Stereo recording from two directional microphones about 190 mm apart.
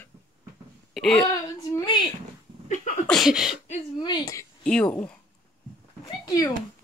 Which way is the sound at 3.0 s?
Centre (ahead or behind).